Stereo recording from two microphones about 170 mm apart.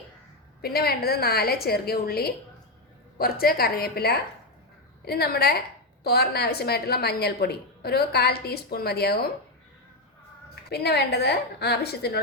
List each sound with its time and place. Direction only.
0.6 s a woman's voice: 65° left (ahead or behind)
10.5 s a woman's voice: 70° left (ahead or behind)